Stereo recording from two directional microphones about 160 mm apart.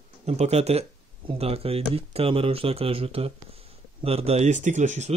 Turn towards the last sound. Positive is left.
turn(degrees=-50)  # may be behind; listen again after turning